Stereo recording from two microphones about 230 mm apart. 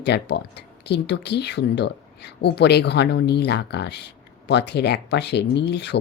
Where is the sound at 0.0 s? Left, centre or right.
Left.